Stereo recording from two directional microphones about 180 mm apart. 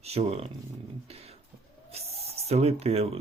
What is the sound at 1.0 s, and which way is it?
Beatboxing, 35° right (ahead or behind).